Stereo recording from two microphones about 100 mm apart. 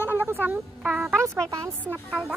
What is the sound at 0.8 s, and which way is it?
Speech, 5° right (ahead or behind).